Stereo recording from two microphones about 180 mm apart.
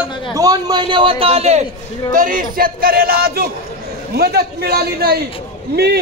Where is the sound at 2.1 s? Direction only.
50° right (ahead or behind).